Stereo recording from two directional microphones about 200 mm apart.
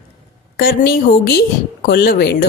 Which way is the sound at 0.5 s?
50° left (ahead or behind).